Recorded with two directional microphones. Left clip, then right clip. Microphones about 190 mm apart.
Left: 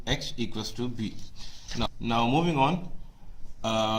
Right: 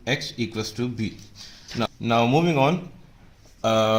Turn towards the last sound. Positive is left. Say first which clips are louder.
# right 7 dB
turn(degrees=-35)  # may be behind; listen again after turning